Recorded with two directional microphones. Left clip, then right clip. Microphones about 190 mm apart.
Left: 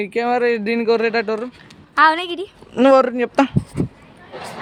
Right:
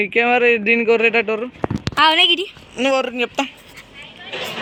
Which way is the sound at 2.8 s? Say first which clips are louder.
Left 5 dB; 55° left (ahead or behind).